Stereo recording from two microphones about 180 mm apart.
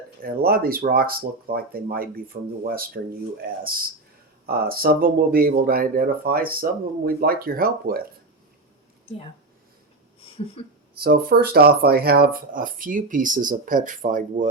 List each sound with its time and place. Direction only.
0.2 s speech: 55° right (ahead or behind)
10.2 s speech: 30° left (ahead or behind)
11.0 s speech: 55° right (ahead or behind)